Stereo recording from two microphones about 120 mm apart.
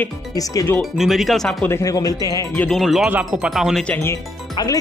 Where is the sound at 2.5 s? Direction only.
5° left (ahead or behind).